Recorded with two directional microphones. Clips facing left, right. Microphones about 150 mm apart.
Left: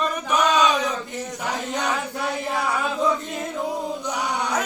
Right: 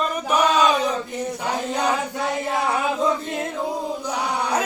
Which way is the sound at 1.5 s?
30° right (ahead or behind).